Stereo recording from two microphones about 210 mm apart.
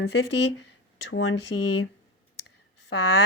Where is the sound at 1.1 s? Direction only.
65° left (ahead or behind).